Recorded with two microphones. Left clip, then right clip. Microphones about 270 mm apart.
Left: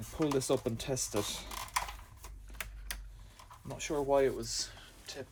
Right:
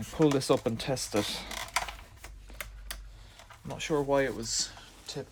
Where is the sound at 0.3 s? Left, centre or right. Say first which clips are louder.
Right 5 dB; right.